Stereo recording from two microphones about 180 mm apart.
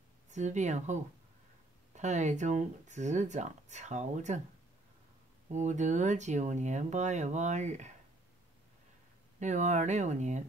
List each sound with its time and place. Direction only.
0.3 s speech: 40° right (ahead or behind)
5.5 s speech: 40° right (ahead or behind)
9.4 s speech: 40° right (ahead or behind)